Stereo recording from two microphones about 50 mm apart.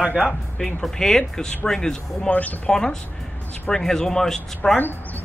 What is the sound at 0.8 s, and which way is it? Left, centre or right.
Speech, centre.